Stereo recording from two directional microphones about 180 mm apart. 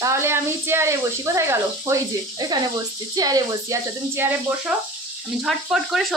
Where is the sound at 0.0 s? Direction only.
15° right (ahead or behind).